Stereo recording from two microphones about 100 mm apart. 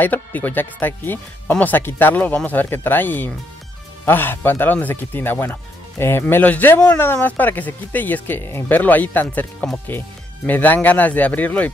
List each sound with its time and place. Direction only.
0.0 s speech: 15° left (ahead or behind)